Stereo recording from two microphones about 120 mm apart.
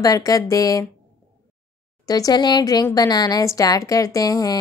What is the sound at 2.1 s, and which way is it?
A woman's voice, 30° left (ahead or behind).